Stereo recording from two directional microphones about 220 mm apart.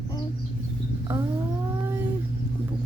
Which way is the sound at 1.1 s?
10° right (ahead or behind).